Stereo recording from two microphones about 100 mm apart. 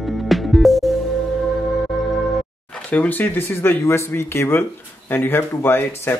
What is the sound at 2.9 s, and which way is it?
Speech, 15° left (ahead or behind).